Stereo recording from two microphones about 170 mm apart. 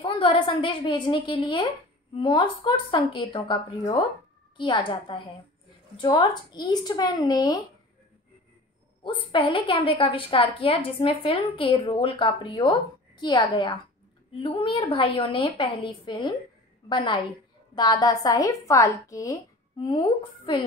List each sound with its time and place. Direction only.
0.0 s a woman's voice: 30° left (ahead or behind)
9.0 s a woman's voice: 30° left (ahead or behind)